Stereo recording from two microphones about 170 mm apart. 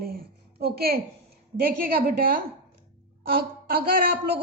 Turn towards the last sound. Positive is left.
turn(degrees=-60)  # may be behind; listen again after turning